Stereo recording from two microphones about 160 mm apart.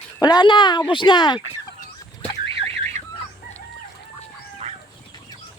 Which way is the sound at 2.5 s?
35° right (ahead or behind).